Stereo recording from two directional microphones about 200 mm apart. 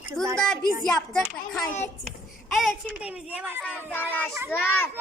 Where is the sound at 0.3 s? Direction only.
5° left (ahead or behind).